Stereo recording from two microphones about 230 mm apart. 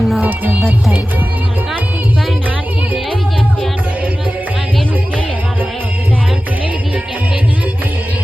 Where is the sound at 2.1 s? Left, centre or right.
Centre.